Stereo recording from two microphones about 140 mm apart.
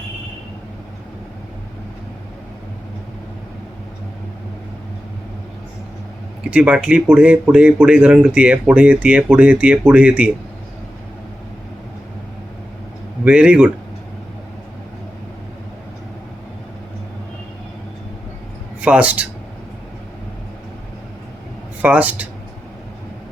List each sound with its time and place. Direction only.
6.5 s speech: 10° right (ahead or behind)
13.2 s speech: 10° right (ahead or behind)
18.8 s speech: 10° right (ahead or behind)
21.8 s speech: 10° right (ahead or behind)